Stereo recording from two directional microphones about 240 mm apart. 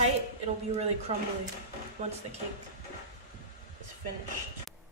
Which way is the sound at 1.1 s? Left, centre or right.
Right.